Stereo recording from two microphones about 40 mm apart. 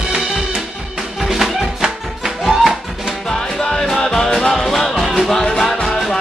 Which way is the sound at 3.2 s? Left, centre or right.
Centre.